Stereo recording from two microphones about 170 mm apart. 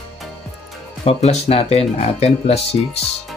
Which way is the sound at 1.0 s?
40° left (ahead or behind).